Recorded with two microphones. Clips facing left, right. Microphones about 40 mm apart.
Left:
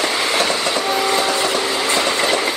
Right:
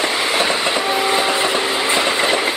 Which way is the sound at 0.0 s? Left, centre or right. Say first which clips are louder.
Even; centre.